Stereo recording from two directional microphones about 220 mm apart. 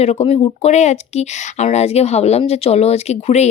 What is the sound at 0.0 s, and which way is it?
Speech, 30° left (ahead or behind).